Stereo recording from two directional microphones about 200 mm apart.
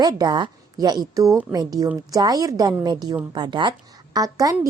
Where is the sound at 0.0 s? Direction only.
20° right (ahead or behind).